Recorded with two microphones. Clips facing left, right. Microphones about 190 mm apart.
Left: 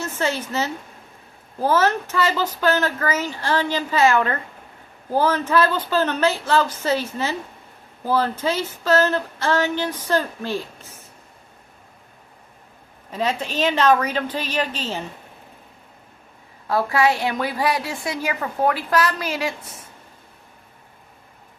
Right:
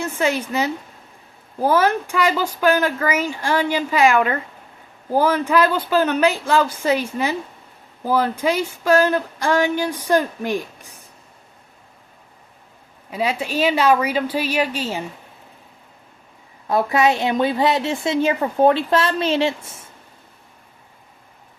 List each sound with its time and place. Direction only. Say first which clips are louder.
0.0 s speech: right 3 dB; 10° right (ahead or behind)
13.1 s speech: right 1 dB; 10° right (ahead or behind)
16.6 s a woman's voice: right 2 dB; 20° right (ahead or behind)